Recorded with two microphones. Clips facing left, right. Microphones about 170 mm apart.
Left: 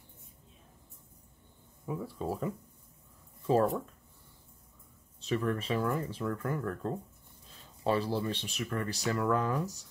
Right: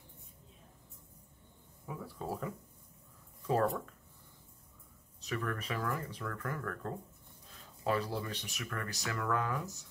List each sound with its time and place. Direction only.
1.9 s speech: 25° left (ahead or behind)
5.2 s speech: 25° left (ahead or behind)